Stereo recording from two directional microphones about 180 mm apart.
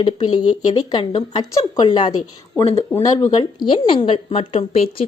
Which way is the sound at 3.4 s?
25° left (ahead or behind).